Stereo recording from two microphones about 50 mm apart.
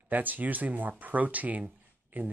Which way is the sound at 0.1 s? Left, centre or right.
Right.